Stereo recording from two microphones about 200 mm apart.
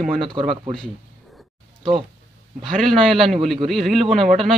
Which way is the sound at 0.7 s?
Centre (ahead or behind).